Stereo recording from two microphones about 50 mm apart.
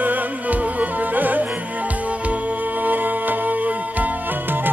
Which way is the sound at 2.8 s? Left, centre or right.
Right.